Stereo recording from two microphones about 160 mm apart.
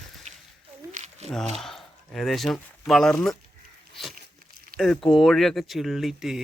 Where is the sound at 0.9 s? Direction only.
45° right (ahead or behind).